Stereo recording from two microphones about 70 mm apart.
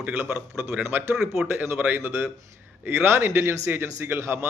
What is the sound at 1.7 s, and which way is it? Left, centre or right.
Speech, right.